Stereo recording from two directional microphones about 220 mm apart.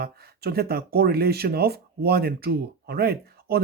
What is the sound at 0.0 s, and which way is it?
Speech, 45° right (ahead or behind).